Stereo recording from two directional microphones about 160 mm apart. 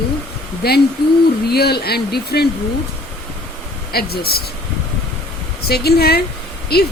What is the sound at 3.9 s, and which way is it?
Speech, 75° left (ahead or behind).